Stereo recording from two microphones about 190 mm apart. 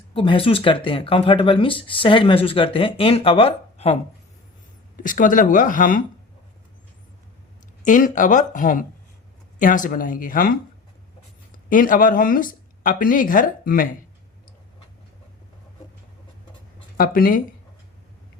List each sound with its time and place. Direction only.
0.1 s speech: 30° left (ahead or behind)
5.0 s speech: 45° left (ahead or behind)
7.9 s speech: 45° left (ahead or behind)
11.7 s speech: 45° left (ahead or behind)
17.0 s speech: 50° left (ahead or behind)